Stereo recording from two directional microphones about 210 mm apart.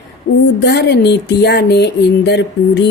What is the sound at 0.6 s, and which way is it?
Speech, 55° left (ahead or behind).